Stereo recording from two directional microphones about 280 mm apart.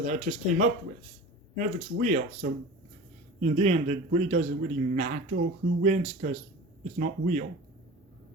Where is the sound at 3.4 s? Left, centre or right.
Right.